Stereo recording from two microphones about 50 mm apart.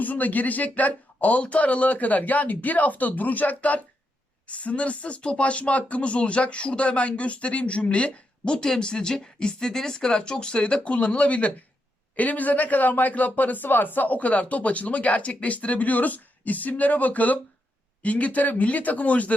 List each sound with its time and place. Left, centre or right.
0.0 s speech: left